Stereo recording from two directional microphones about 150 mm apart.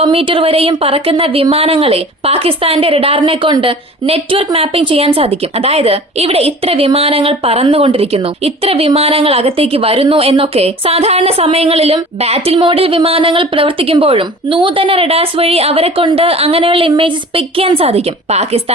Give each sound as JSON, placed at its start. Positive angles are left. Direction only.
{"t": 0.0, "sound": "speech", "side_deg": -40}